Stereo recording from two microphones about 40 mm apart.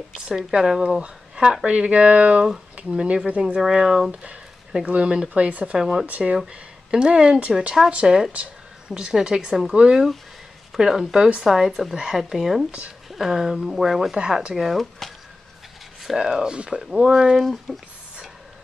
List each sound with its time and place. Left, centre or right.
0.3 s speech: centre
1.7 s speech: right
3.6 s speech: centre
4.1 s speech: right
5.8 s speech: centre
6.0 s speech: right
6.3 s speech: centre
8.3 s a sound: right
8.9 s speech: centre
16.0 s a sound: centre
16.3 s speech: centre
17.0 s speech: right
17.4 s speech: centre